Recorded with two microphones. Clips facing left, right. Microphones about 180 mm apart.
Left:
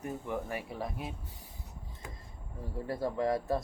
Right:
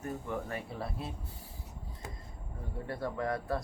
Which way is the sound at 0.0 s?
15° left (ahead or behind).